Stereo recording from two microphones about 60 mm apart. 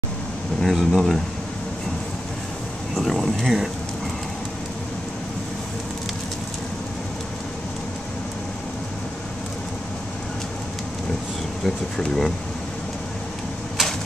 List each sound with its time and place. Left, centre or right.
0.6 s speech: centre
3.0 s speech: centre
11.6 s speech: centre